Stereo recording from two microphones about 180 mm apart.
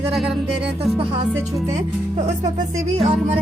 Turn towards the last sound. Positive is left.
turn(degrees=-35)  # may be behind; listen again after turning